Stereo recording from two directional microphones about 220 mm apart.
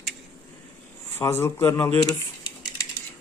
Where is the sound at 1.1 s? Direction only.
10° left (ahead or behind).